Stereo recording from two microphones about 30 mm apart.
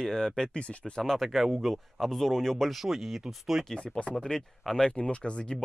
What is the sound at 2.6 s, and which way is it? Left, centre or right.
Speech, centre.